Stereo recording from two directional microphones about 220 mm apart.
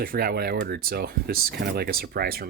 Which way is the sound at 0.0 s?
40° right (ahead or behind).